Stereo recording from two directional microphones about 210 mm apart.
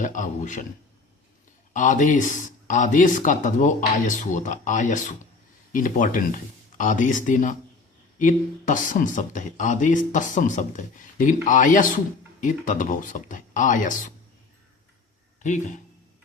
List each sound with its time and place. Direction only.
0.0 s speech: 35° left (ahead or behind)
1.7 s speech: 35° left (ahead or behind)
15.4 s speech: 35° left (ahead or behind)